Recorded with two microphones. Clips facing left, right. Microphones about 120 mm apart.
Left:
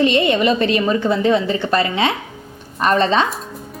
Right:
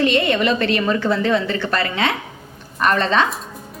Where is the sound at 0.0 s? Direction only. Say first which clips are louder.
Left 2 dB; 20° left (ahead or behind).